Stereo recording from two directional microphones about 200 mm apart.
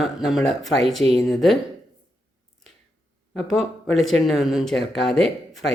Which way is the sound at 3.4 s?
Centre (ahead or behind).